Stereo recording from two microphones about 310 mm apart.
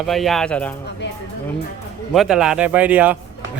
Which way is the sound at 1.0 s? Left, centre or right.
Left.